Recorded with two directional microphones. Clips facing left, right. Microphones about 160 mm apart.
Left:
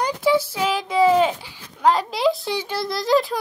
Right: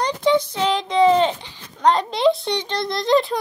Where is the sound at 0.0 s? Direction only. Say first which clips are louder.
Right 1 dB; 5° left (ahead or behind).